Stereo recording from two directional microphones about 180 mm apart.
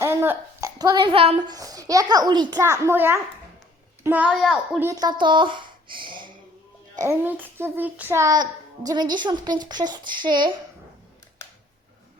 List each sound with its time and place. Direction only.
0.0 s child singing: 15° right (ahead or behind)
4.0 s a child's voice: 10° right (ahead or behind)
4.9 s child singing: 20° right (ahead or behind)
7.0 s child singing: 10° right (ahead or behind)